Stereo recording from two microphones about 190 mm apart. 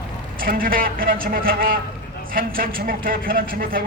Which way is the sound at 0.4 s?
50° right (ahead or behind).